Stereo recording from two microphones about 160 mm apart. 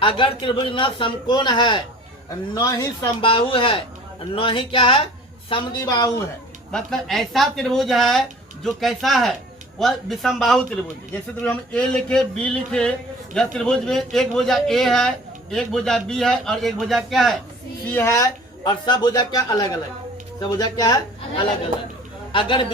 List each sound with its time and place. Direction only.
0.0 s a man's voice: 30° left (ahead or behind)
6.7 s a man's voice: 5° left (ahead or behind)
17.9 s a man's voice: 20° left (ahead or behind)